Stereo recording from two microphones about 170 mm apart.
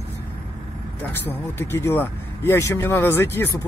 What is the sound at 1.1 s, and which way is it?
Speech, 15° left (ahead or behind).